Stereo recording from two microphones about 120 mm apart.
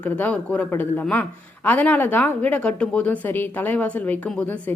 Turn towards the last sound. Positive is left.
turn(degrees=10)  # may be behind; listen again after turning